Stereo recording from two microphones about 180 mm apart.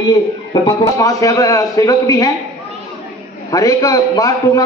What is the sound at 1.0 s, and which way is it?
A man's voice, 20° left (ahead or behind).